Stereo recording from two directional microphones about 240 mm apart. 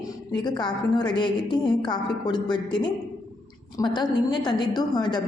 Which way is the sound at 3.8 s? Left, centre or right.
Centre.